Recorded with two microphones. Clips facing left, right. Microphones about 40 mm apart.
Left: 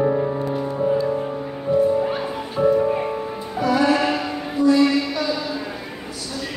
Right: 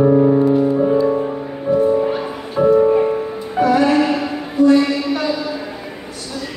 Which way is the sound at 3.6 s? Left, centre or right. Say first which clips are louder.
Right 6 dB; right.